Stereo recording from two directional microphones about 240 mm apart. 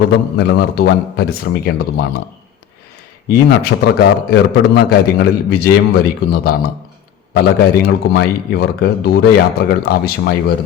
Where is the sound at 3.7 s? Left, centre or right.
Left.